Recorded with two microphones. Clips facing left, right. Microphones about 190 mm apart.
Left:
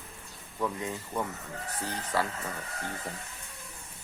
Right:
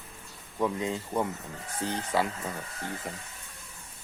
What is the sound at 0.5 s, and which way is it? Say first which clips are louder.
Speech: right 4 dB; 20° right (ahead or behind).